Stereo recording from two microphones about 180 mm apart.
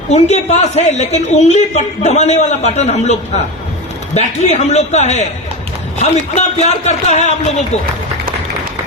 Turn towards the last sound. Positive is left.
turn(degrees=40)  # may be behind; listen again after turning